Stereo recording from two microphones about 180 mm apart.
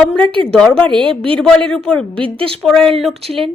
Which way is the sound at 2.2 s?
30° right (ahead or behind).